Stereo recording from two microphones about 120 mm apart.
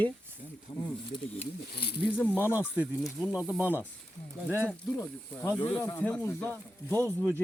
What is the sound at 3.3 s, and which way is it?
Speech, 15° right (ahead or behind).